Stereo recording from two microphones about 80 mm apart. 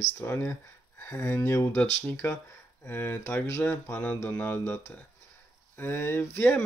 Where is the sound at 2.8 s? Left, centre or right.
Left.